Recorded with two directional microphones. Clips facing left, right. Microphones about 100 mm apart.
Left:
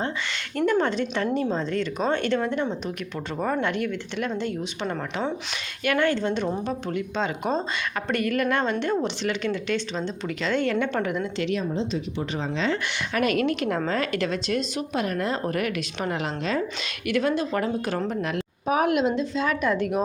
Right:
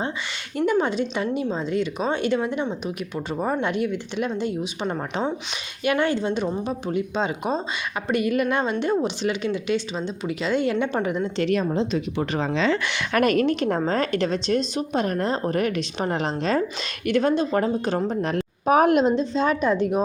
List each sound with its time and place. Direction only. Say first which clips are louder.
0.5 s a woman's voice: right 1 dB; 10° right (ahead or behind); by 11.4 s 25° right (ahead or behind)
11.4 s speech: right 6 dB; 55° right (ahead or behind)
12.4 s speech: right 4 dB; 90° right
13.2 s a woman's voice: right 3 dB; 35° right (ahead or behind)
18.6 s a woman's voice: right 5 dB; 50° right (ahead or behind); by 20.0 s 20° right (ahead or behind)